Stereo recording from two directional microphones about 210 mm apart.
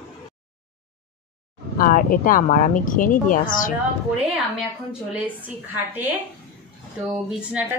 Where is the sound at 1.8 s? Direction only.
40° left (ahead or behind).